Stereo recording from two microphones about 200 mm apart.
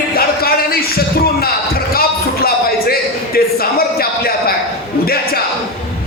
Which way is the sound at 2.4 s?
50° left (ahead or behind).